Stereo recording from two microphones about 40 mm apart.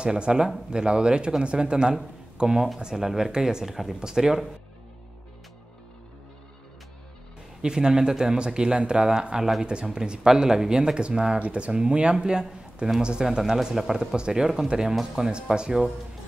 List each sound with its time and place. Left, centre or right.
0.0 s speech: right
3.6 s speech: centre
4.0 s speech: centre
7.6 s speech: centre
13.5 s speech: centre